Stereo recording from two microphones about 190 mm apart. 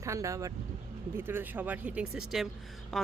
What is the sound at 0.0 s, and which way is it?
Speech, 15° right (ahead or behind).